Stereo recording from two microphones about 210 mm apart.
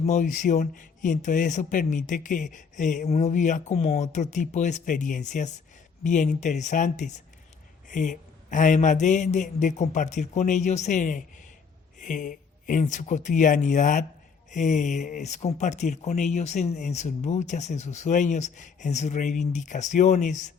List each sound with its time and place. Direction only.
0.0 s speech: 35° left (ahead or behind)